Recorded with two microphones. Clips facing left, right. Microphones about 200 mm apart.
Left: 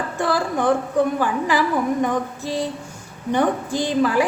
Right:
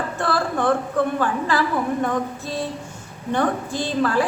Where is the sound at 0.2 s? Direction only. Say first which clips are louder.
Left 2 dB; 15° left (ahead or behind).